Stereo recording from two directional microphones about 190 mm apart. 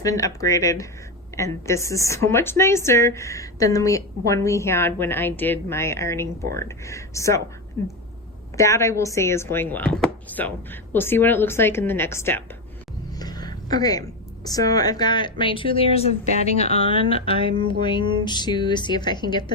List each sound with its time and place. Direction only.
0.0 s speech: 15° left (ahead or behind)
8.5 s a woman's voice: 15° left (ahead or behind)